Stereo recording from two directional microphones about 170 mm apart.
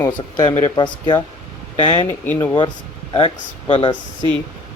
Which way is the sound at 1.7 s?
40° left (ahead or behind).